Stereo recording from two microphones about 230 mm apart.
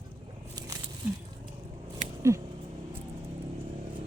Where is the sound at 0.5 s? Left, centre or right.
Centre.